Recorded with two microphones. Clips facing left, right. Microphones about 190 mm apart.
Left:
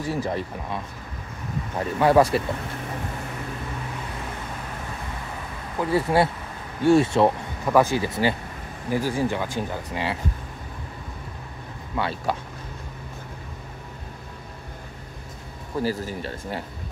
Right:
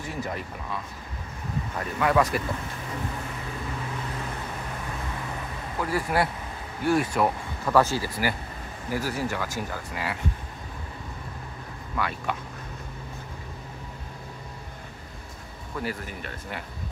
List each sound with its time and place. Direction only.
0.0 s speech: 35° left (ahead or behind)
1.8 s speech: 30° left (ahead or behind)
5.8 s speech: 25° left (ahead or behind)
12.0 s speech: 30° left (ahead or behind)
15.7 s speech: 30° left (ahead or behind)